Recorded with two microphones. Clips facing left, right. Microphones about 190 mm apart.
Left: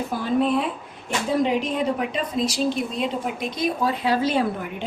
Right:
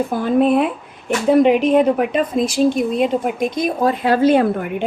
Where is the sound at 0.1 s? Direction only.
55° right (ahead or behind).